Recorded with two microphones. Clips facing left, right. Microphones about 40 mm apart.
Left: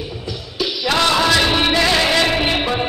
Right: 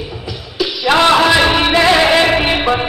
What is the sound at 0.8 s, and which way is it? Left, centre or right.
Music, right.